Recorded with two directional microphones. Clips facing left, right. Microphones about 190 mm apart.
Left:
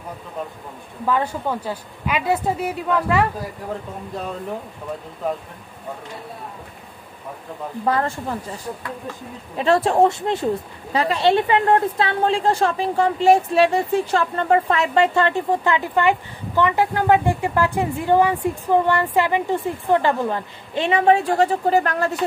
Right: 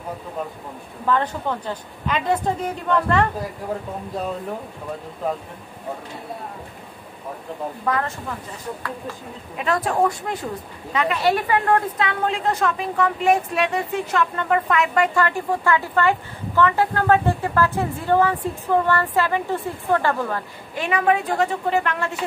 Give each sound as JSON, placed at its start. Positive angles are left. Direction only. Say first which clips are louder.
{"t": 1.0, "sound": "a woman's voice", "louder": "even", "side_deg": 10}
{"t": 7.8, "sound": "speech", "louder": "left 4 dB", "side_deg": 35}
{"t": 9.6, "sound": "speech", "louder": "left 5 dB", "side_deg": 25}